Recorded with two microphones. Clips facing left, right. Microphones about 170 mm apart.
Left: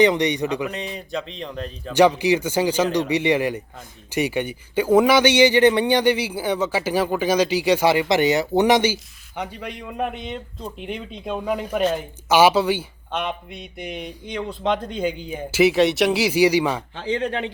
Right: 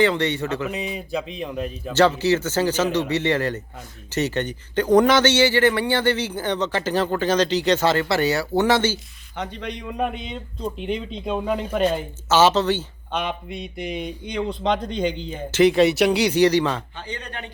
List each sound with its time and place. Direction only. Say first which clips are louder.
0.0 s a man's voice: left 2 dB; 15° left (ahead or behind)
0.7 s speech: right 2 dB; 5° right (ahead or behind)
1.9 s a man's voice: left 2 dB; 15° left (ahead or behind)
13.1 s a man's voice: even; centre (ahead or behind)
16.9 s speech: left 10 dB; 90° left